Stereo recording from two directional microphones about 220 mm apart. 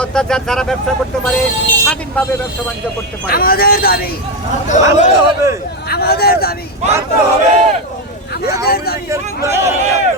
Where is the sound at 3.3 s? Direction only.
45° left (ahead or behind).